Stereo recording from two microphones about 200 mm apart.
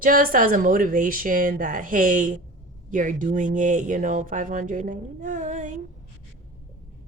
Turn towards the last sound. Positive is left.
turn(degrees=-40)  # may be behind; listen again after turning